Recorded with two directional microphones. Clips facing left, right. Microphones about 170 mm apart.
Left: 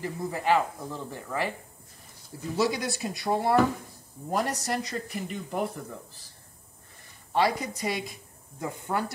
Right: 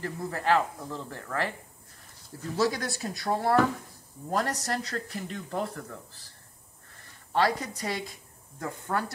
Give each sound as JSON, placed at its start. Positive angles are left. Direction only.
{"t": 0.0, "sound": "a man's voice", "side_deg": 10}
{"t": 7.3, "sound": "a man's voice", "side_deg": 15}